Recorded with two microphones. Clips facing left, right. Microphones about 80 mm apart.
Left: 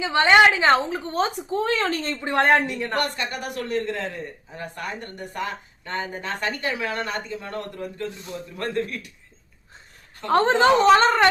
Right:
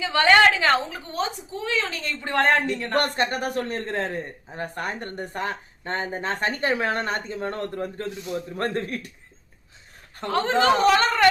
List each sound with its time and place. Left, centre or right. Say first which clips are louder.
0.0 s a woman's voice: left 1 dB; left
1.5 s speech: left 5 dB; left
2.2 s a woman's voice: left 1 dB; left
2.9 s a man's voice: right 7 dB; right
10.2 s a woman's voice: left 3 dB; left